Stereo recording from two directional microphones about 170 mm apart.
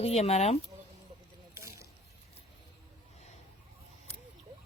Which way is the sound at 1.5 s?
15° right (ahead or behind).